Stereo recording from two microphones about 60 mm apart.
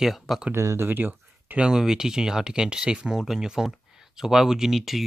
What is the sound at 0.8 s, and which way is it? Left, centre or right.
Speech, right.